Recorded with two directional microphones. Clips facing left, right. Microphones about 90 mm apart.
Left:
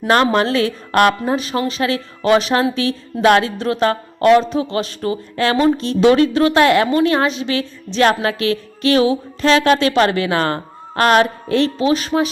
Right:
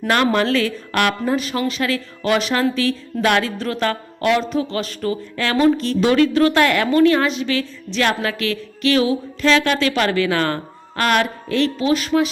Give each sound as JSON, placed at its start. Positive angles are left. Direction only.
{"t": 0.1, "sound": "speech", "side_deg": 30}
{"t": 2.6, "sound": "speech", "side_deg": 20}